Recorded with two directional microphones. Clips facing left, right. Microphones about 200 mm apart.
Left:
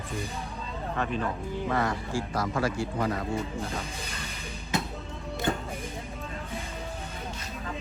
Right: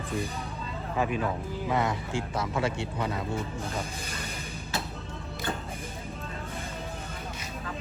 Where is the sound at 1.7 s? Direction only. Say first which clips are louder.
Right 1 dB; 20° right (ahead or behind).